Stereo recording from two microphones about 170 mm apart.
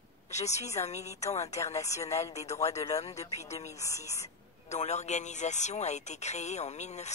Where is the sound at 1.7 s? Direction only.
20° left (ahead or behind).